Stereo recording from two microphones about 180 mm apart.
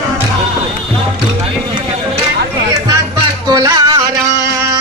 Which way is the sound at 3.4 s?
20° right (ahead or behind).